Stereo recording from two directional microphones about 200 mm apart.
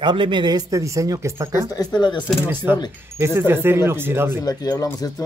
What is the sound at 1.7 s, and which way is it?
Speech, 20° left (ahead or behind).